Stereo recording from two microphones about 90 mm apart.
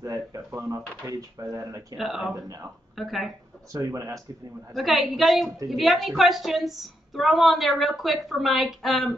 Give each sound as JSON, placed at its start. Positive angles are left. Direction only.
{"t": 0.0, "sound": "speech", "side_deg": -40}
{"t": 2.0, "sound": "a woman's voice", "side_deg": -5}
{"t": 3.7, "sound": "speech", "side_deg": -40}
{"t": 4.7, "sound": "a woman's voice", "side_deg": 0}